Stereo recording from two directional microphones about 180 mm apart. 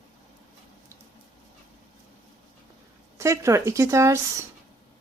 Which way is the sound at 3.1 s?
15° right (ahead or behind).